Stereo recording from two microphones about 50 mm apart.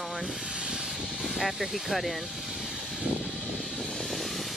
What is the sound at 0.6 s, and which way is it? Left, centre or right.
Vehicle, centre.